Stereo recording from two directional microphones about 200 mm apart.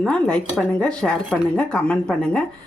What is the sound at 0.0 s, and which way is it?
Speech, 5° left (ahead or behind).